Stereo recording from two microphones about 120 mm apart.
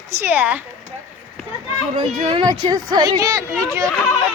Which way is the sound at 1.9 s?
40° right (ahead or behind).